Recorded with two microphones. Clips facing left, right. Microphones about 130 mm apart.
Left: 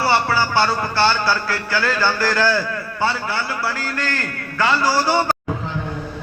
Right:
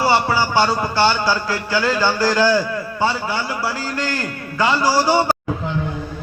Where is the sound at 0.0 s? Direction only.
15° right (ahead or behind).